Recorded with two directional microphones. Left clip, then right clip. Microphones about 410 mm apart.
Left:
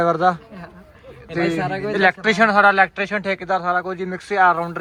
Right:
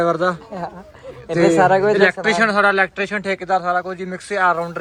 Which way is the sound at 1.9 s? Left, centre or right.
Centre.